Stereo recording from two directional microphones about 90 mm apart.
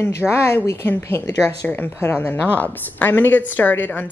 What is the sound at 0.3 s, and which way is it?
A woman's voice, 30° left (ahead or behind).